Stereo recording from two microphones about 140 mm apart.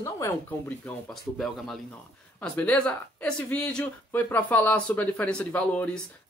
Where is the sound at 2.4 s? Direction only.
10° left (ahead or behind).